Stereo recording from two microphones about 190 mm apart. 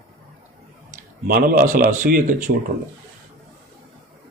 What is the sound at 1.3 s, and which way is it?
Speech, 50° right (ahead or behind).